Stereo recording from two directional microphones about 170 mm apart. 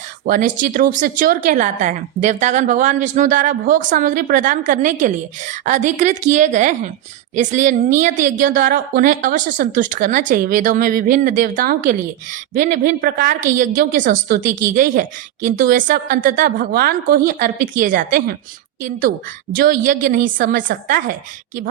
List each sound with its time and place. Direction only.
0.3 s a woman's voice: 50° right (ahead or behind)
19.5 s a woman's voice: 55° right (ahead or behind)